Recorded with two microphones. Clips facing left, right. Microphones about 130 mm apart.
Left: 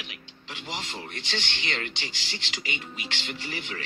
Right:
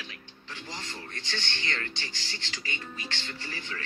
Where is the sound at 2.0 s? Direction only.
85° left.